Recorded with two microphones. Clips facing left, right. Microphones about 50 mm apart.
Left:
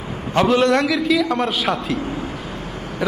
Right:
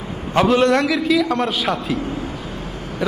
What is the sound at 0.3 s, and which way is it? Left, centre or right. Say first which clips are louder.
A man's voice: right 1 dB; centre.